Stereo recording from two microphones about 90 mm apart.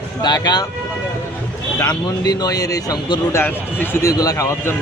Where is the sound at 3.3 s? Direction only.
25° left (ahead or behind).